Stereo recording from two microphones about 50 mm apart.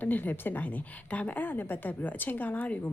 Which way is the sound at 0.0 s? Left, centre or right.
Left.